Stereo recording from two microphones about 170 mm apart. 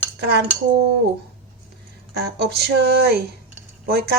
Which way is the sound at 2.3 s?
70° right (ahead or behind).